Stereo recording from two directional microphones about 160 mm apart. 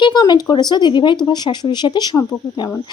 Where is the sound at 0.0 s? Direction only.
25° left (ahead or behind).